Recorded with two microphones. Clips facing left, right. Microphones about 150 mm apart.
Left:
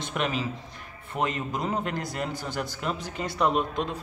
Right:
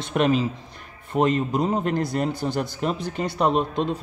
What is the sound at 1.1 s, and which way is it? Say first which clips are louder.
A man's voice: right 8 dB; 30° right (ahead or behind).